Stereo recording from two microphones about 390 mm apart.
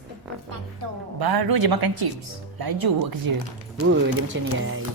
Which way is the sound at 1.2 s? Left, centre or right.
Right.